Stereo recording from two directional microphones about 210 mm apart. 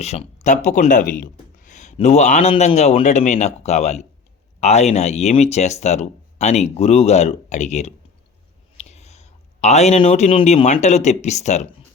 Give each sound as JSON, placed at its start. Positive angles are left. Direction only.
{"t": 0.0, "sound": "speech", "side_deg": 30}